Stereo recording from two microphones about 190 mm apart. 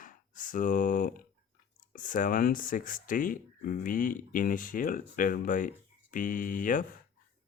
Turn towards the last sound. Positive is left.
turn(degrees=45)  # may be behind; listen again after turning